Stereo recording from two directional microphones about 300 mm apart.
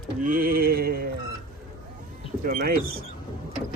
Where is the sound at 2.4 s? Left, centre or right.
Right.